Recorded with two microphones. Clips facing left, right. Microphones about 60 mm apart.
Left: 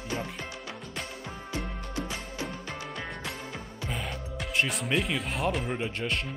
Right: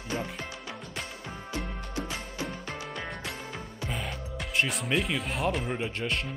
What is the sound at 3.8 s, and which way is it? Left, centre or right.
Speech, centre.